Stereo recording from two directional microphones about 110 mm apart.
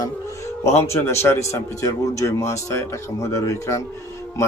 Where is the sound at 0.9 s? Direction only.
25° left (ahead or behind).